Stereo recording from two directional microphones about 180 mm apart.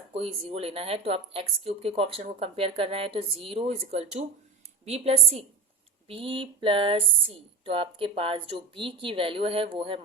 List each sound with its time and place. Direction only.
0.1 s speech: 35° right (ahead or behind)